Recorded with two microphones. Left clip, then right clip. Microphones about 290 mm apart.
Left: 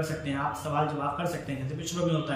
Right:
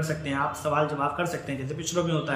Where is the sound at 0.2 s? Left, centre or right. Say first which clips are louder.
Right 4 dB; centre.